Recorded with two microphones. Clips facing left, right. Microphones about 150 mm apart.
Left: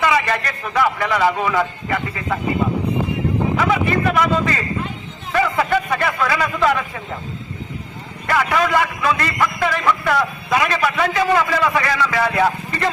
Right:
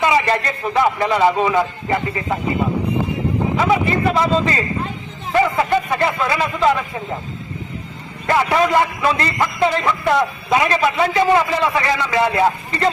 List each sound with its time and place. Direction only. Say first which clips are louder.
0.0 s a man's voice: right 2 dB; 25° right (ahead or behind)
3.6 s a man's voice: right 3 dB; 25° right (ahead or behind)
8.3 s a man's voice: right 2 dB; 25° right (ahead or behind)